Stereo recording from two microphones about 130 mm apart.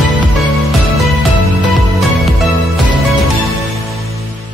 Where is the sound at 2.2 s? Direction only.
Centre (ahead or behind).